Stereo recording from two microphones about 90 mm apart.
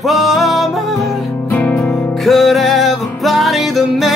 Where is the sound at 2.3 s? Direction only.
Centre (ahead or behind).